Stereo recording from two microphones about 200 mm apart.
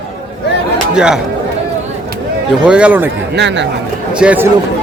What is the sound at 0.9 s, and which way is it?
Speech, 5° right (ahead or behind).